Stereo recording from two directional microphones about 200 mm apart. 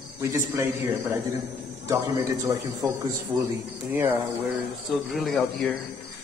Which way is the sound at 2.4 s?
15° right (ahead or behind).